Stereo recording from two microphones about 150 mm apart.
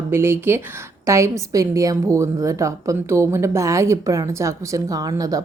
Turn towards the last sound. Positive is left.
turn(degrees=-25)  # may be behind; listen again after turning